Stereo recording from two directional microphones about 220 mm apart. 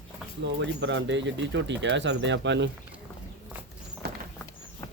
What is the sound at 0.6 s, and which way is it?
Speech, 55° right (ahead or behind).